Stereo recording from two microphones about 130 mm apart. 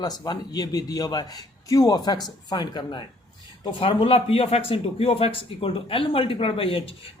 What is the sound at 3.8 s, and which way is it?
A man's voice, 45° left (ahead or behind).